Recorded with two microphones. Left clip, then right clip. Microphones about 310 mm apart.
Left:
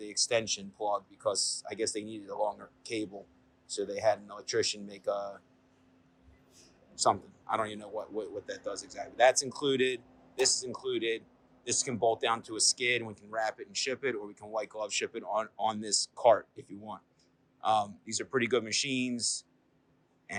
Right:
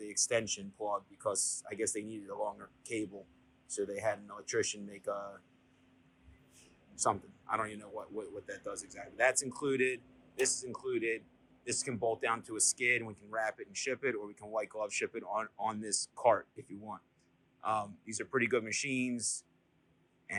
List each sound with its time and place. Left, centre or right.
0.0 s speech: centre
7.0 s speech: centre
9.1 s speech: centre
10.8 s speech: centre